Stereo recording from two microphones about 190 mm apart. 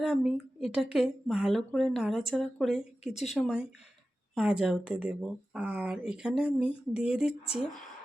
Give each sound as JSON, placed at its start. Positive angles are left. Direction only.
{"t": 0.0, "sound": "speech", "side_deg": -5}
{"t": 3.0, "sound": "speech", "side_deg": 35}
{"t": 3.2, "sound": "speech", "side_deg": 0}